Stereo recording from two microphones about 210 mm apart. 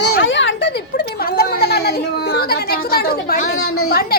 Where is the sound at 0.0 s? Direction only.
60° left (ahead or behind).